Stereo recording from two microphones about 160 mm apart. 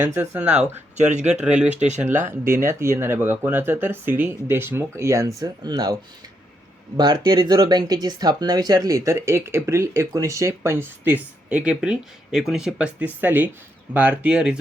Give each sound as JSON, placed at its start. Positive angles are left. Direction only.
{"t": 0.0, "sound": "speech", "side_deg": -15}
{"t": 0.9, "sound": "speech", "side_deg": -45}
{"t": 1.3, "sound": "speech", "side_deg": -5}